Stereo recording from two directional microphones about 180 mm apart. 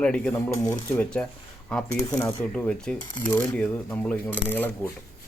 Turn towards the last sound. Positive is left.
turn(degrees=10)  # may be behind; listen again after turning